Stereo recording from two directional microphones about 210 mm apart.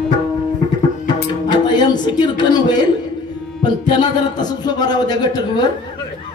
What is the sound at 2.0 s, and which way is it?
A man's voice, 20° left (ahead or behind).